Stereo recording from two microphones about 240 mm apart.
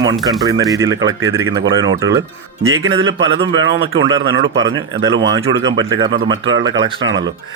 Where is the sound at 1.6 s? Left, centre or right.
Right.